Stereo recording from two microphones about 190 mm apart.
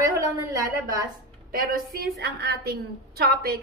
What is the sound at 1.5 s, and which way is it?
A woman's voice, 50° right (ahead or behind).